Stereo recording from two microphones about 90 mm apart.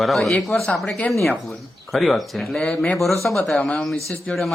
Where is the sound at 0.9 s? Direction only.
15° left (ahead or behind).